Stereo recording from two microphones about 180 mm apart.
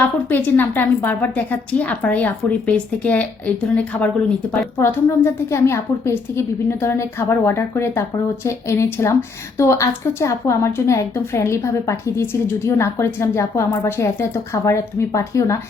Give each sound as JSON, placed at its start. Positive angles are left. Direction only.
{"t": 0.0, "sound": "a woman's voice", "side_deg": 10}